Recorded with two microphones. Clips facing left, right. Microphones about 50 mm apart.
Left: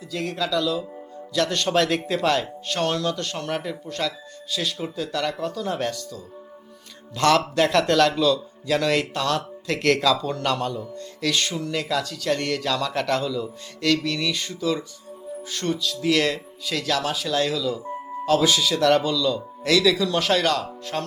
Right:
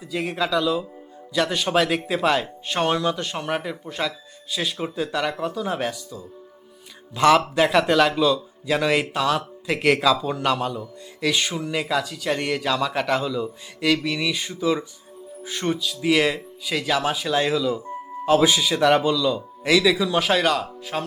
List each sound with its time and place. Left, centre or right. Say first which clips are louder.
0.1 s a man's voice: right 2 dB; centre